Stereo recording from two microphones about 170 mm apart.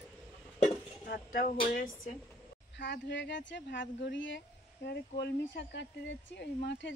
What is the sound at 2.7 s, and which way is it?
Speech, 90° left.